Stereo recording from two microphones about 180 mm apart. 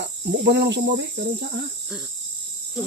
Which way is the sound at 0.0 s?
70° right (ahead or behind).